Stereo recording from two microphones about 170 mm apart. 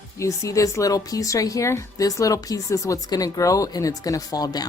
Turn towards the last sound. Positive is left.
turn(degrees=20)  # may be behind; listen again after turning